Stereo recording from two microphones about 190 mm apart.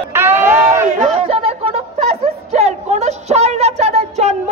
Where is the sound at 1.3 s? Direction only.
30° right (ahead or behind).